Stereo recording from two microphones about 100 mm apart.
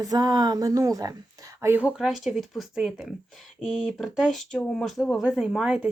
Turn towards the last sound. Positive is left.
turn(degrees=-10)  # may be behind; listen again after turning